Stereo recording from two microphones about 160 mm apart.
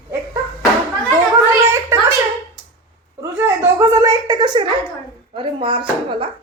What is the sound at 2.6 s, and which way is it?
Dog, 30° left (ahead or behind).